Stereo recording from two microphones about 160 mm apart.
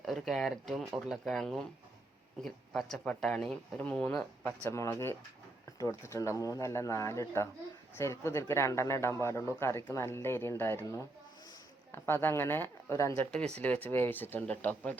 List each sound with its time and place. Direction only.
0.0 s speech: centre (ahead or behind)